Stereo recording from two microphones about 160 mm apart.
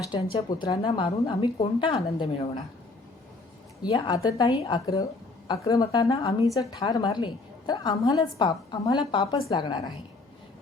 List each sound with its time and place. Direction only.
0.2 s a woman's voice: 40° left (ahead or behind)
3.8 s a woman's voice: 30° left (ahead or behind)
6.2 s a woman's voice: 35° left (ahead or behind)
6.5 s a woman's voice: 20° left (ahead or behind)